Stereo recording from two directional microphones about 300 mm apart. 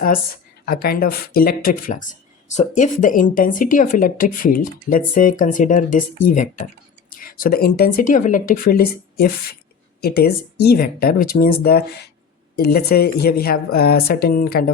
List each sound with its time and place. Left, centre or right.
0.7 s speech: left